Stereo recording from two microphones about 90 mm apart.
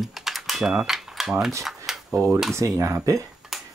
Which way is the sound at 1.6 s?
5° right (ahead or behind).